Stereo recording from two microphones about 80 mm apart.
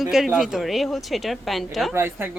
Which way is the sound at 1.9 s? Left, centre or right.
Right.